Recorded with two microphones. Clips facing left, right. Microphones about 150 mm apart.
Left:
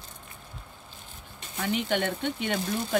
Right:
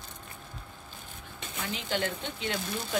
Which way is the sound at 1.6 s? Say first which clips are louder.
Left 5 dB; 65° left (ahead or behind).